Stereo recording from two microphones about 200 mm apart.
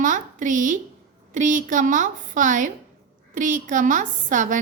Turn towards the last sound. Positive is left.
turn(degrees=-40)  # may be behind; listen again after turning